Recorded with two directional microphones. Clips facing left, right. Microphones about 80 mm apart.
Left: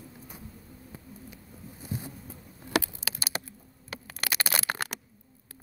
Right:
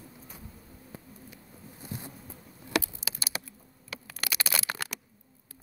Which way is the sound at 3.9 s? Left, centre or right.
Left.